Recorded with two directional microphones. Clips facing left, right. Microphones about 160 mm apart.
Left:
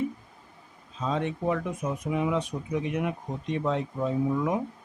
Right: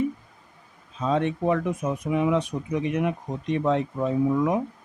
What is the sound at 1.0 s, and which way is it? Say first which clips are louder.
Speech: right 5 dB; 65° right (ahead or behind).